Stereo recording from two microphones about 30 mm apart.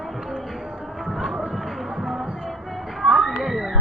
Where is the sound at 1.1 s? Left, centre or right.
Centre.